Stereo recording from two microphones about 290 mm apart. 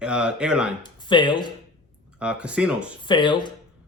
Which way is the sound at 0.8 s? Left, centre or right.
Centre.